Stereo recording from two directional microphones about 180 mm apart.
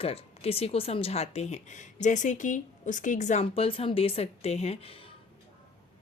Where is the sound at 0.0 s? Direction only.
35° left (ahead or behind).